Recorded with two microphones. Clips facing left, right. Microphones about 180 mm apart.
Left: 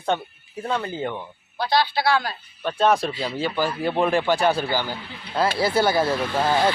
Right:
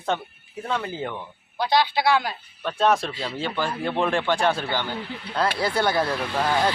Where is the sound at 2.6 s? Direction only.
Centre (ahead or behind).